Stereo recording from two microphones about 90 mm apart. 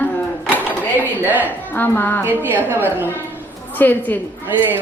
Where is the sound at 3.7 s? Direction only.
20° left (ahead or behind).